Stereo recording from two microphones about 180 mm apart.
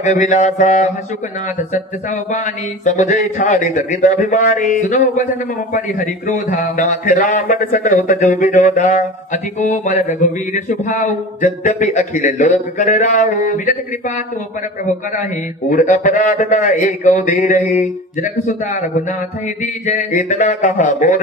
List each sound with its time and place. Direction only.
0.0 s mantra: 40° left (ahead or behind)
2.3 s a man's voice: 40° left (ahead or behind)
15.7 s a man's voice: 45° left (ahead or behind)